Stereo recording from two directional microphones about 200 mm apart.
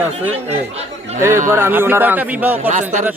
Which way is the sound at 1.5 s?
10° right (ahead or behind).